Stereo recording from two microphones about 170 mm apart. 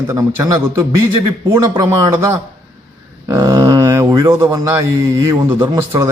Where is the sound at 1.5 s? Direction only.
15° right (ahead or behind).